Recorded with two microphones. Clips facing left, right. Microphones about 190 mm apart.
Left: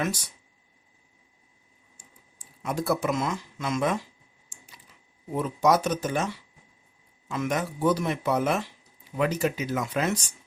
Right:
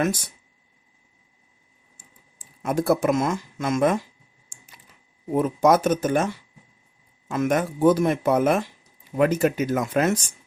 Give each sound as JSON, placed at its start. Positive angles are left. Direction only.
{"t": 0.0, "sound": "speech", "side_deg": -50}
{"t": 2.6, "sound": "speech", "side_deg": -50}
{"t": 4.4, "sound": "typing", "side_deg": -50}
{"t": 5.3, "sound": "speech", "side_deg": -50}